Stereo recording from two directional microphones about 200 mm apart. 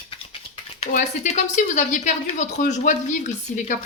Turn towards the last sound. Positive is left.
turn(degrees=35)  # may be behind; listen again after turning